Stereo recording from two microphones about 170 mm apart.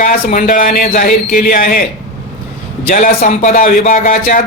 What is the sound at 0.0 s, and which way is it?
Speech, 50° left (ahead or behind).